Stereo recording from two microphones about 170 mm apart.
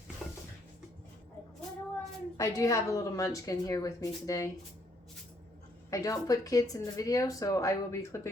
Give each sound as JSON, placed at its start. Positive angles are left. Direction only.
{"t": 0.2, "sound": "a sound", "side_deg": 0}
{"t": 2.4, "sound": "speech", "side_deg": 20}
{"t": 5.9, "sound": "speech", "side_deg": 20}